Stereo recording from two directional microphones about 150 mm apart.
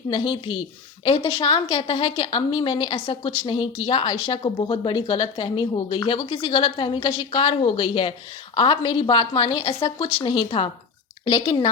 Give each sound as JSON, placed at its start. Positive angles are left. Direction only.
{"t": 0.1, "sound": "a woman's voice", "side_deg": 30}